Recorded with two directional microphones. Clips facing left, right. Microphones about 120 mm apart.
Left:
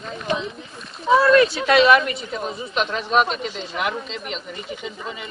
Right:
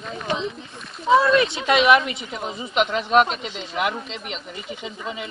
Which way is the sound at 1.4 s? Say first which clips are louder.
Left 4 dB; 15° right (ahead or behind).